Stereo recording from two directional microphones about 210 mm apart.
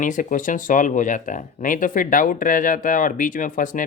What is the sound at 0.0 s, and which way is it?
Speech, 40° left (ahead or behind).